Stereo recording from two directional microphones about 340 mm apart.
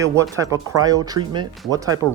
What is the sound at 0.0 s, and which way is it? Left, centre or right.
Speech, centre.